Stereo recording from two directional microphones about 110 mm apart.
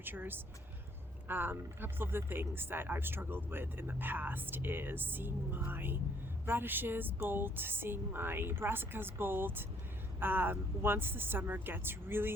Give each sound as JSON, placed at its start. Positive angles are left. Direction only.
{"t": 0.0, "sound": "speech", "side_deg": -20}